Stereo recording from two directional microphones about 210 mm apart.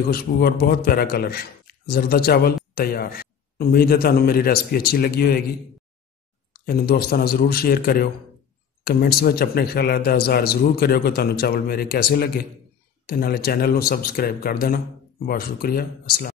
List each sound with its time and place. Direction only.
0.1 s a man's voice: 45° left (ahead or behind)
6.5 s a man's voice: 45° left (ahead or behind)